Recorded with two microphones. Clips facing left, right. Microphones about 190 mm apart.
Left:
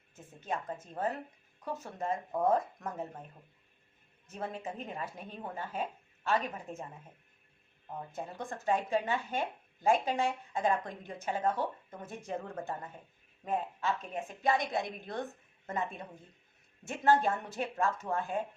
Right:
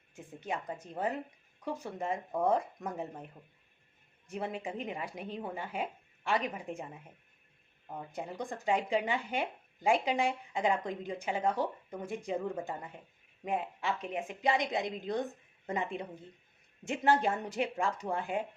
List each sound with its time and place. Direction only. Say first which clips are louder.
0.1 s speech: even; 15° right (ahead or behind)
4.3 s speech: right 2 dB; 15° right (ahead or behind)
8.1 s speech: right 3 dB; 15° right (ahead or behind)